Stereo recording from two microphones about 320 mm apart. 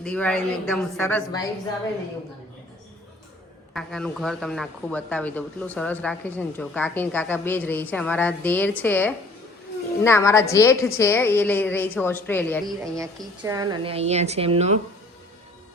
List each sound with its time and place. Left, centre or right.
0.0 s a woman's voice: centre
3.8 s a woman's voice: centre
12.6 s a woman's voice: centre